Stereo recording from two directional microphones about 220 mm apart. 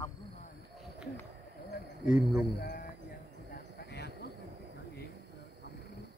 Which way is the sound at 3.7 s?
50° left (ahead or behind).